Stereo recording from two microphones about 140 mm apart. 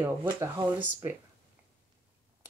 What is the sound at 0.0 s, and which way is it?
Speech, 15° right (ahead or behind).